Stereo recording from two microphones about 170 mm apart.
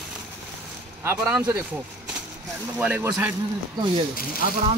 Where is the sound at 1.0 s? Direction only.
10° right (ahead or behind).